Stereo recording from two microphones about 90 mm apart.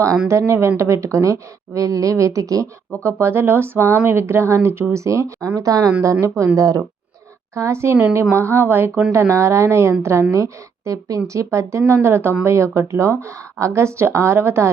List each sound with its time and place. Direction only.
0.3 s speech: 30° right (ahead or behind)
7.5 s speech: 30° right (ahead or behind)